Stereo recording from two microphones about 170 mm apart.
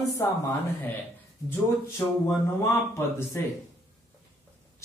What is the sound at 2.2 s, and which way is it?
Speech, 15° left (ahead or behind).